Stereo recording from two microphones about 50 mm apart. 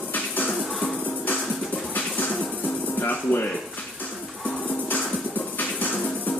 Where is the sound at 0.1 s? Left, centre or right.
Left.